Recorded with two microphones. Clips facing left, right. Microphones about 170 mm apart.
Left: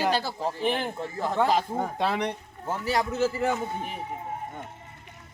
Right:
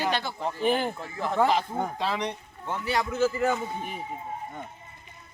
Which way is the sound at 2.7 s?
40° left (ahead or behind).